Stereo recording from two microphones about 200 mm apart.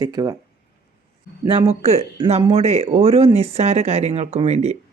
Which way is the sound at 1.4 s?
25° right (ahead or behind).